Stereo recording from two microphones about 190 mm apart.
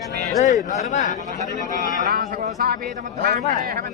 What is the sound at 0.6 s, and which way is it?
Speech, 40° left (ahead or behind).